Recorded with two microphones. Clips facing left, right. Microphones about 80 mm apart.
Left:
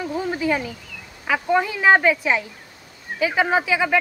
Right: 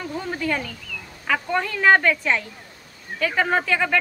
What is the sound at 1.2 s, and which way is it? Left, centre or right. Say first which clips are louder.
Speech: left 3 dB; centre.